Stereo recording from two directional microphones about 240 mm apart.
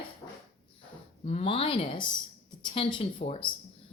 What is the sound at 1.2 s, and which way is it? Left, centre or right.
A woman's voice, left.